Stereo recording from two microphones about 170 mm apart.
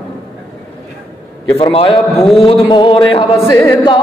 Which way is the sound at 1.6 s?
35° left (ahead or behind).